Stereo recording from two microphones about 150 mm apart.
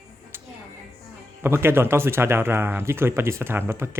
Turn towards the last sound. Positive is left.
turn(degrees=-15)  # may be behind; listen again after turning